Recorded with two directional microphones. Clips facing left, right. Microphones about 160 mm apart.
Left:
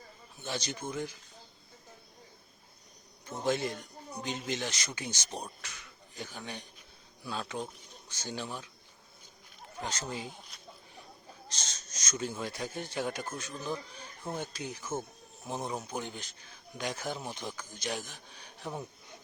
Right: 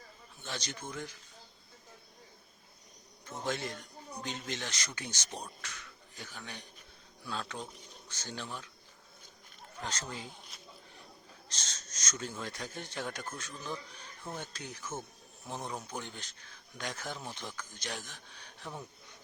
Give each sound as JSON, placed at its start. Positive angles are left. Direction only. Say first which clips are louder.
{"t": 0.4, "sound": "speech", "louder": "left 5 dB", "side_deg": 10}
{"t": 3.2, "sound": "speech", "louder": "left 5 dB", "side_deg": 10}
{"t": 9.8, "sound": "speech", "louder": "left 3 dB", "side_deg": 10}
{"t": 11.4, "sound": "speech", "louder": "left 2 dB", "side_deg": 10}
{"t": 14.3, "sound": "speech", "louder": "left 5 dB", "side_deg": 15}